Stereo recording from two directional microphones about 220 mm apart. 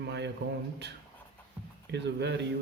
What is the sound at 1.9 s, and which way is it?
Speech, 50° right (ahead or behind).